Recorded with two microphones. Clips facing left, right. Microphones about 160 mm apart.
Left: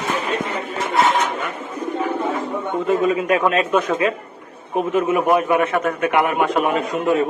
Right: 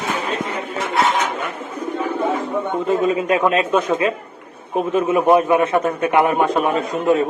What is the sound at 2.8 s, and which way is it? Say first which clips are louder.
A man's voice: left 1 dB; 25° right (ahead or behind).